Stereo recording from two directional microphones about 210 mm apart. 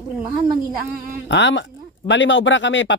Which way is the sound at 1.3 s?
60° left (ahead or behind).